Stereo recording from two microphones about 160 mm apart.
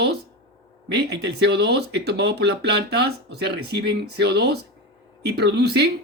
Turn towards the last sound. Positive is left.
turn(degrees=-90)